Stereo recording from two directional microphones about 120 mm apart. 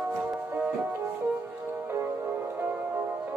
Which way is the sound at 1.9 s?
20° right (ahead or behind).